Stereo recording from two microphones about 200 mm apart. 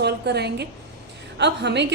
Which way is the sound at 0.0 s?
55° right (ahead or behind).